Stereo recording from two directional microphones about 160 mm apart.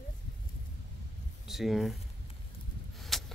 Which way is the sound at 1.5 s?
Centre (ahead or behind).